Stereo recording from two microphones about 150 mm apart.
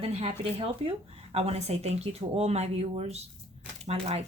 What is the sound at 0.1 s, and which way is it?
A woman's voice, 40° right (ahead or behind).